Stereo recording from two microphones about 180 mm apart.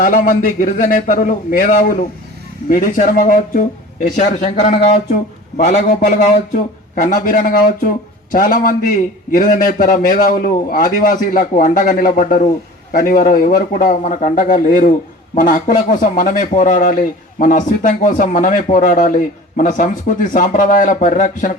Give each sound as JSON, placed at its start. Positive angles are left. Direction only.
{"t": 0.0, "sound": "a man's voice", "side_deg": 45}